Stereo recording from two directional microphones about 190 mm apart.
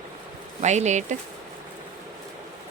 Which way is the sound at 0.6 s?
40° right (ahead or behind).